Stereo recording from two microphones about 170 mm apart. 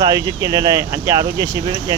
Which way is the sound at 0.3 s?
20° right (ahead or behind).